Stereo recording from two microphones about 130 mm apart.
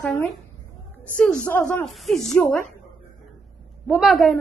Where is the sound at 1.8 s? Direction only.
Centre (ahead or behind).